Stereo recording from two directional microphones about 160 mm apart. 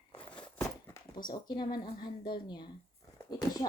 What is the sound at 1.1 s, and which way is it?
Speech, 25° left (ahead or behind).